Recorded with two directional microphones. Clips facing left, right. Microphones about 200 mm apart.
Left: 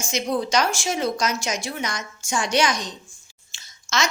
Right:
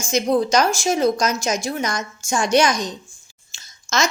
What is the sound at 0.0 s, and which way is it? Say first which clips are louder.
A woman's voice: right 6 dB; 45° right (ahead or behind).